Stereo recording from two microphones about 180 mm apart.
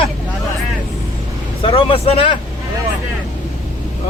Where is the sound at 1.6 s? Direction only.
30° left (ahead or behind).